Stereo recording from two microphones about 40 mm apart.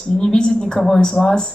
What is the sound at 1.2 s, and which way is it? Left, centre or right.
Speech, left.